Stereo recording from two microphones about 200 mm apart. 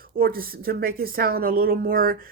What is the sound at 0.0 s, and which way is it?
A woman's voice, 45° right (ahead or behind).